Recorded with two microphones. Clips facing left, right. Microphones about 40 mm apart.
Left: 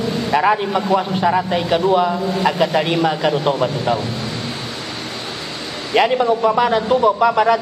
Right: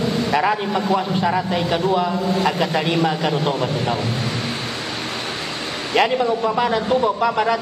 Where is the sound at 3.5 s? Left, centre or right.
Left.